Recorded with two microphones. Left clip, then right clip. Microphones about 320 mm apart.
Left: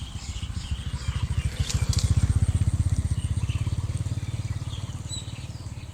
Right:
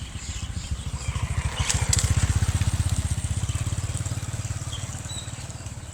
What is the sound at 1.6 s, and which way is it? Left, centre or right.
Vehicle, right.